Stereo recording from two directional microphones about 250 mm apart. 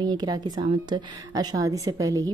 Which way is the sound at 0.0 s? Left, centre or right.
Centre.